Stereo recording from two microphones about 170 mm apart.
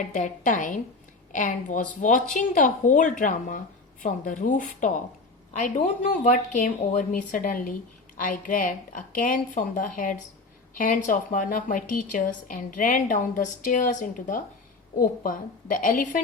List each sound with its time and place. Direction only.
0.0 s a woman's voice: 50° left (ahead or behind)